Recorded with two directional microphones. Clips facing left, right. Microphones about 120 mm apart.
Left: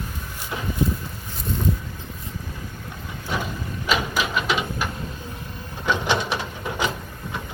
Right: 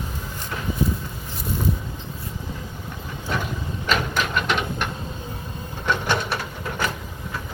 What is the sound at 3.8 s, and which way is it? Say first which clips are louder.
Printer: even; 5° left (ahead or behind).